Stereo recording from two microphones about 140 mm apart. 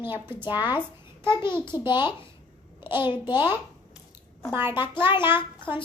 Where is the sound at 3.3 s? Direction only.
15° right (ahead or behind).